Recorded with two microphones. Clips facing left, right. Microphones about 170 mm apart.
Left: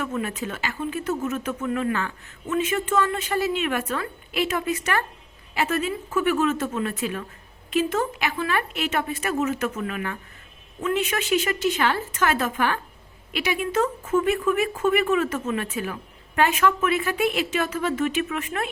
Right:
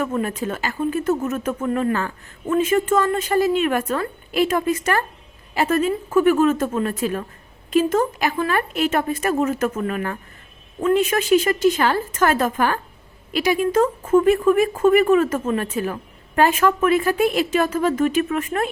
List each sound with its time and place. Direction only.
0.0 s speech: 40° right (ahead or behind)